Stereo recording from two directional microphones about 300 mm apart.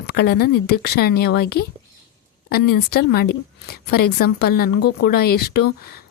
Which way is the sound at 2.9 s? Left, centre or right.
Left.